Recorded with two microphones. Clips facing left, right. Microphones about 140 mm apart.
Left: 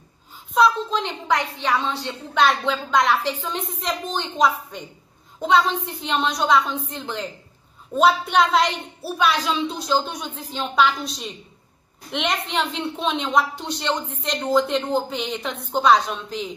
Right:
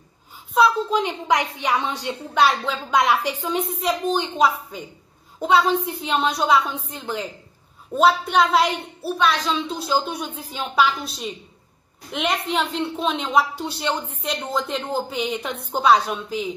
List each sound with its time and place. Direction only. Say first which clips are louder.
0.6 s a woman's voice: right 1 dB; 10° right (ahead or behind)